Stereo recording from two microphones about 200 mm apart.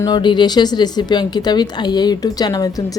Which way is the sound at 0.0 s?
20° left (ahead or behind).